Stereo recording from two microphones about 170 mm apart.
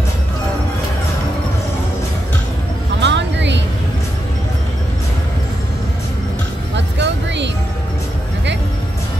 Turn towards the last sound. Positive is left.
turn(degrees=-90)